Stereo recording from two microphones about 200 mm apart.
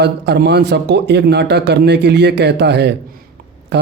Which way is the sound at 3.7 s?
55° right (ahead or behind).